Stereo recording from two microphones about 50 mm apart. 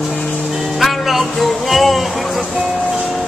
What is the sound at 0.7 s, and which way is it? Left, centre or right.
Music, centre.